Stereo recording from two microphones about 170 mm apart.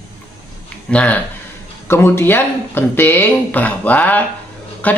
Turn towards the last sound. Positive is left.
turn(degrees=10)  # may be behind; listen again after turning